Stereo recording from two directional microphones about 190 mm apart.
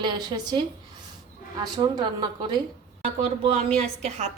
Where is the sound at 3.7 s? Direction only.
35° right (ahead or behind).